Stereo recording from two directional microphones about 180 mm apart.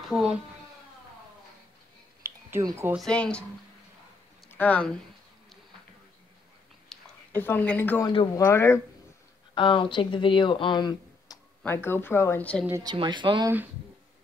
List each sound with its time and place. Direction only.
0.1 s speech: 5° right (ahead or behind)
2.2 s a sound: 15° right (ahead or behind)
3.0 s speech: 5° left (ahead or behind)
4.5 s speech: 10° left (ahead or behind)
6.9 s a sound: centre (ahead or behind)
7.3 s a woman's voice: 10° left (ahead or behind)
8.1 s speech: 25° left (ahead or behind)
8.5 s a woman's voice: 15° left (ahead or behind)
9.6 s a woman's voice: 25° left (ahead or behind); by 12.6 s 10° left (ahead or behind)
12.8 s speech: 25° right (ahead or behind)